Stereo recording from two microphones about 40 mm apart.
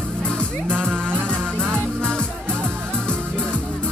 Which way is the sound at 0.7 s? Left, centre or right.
Right.